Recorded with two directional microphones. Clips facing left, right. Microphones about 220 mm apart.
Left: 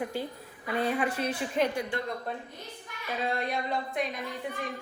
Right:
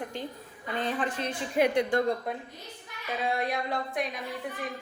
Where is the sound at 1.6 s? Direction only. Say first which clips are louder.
Right 5 dB; 20° right (ahead or behind).